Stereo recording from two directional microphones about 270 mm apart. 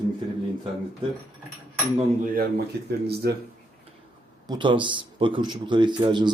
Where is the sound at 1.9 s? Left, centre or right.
Right.